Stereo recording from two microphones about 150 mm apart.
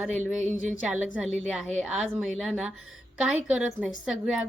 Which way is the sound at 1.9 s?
5° right (ahead or behind).